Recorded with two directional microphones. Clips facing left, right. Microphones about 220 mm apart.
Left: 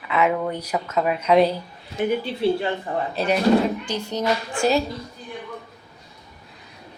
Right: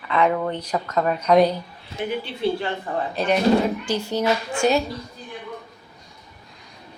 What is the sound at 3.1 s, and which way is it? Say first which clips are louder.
Speech: right 1 dB; 5° left (ahead or behind).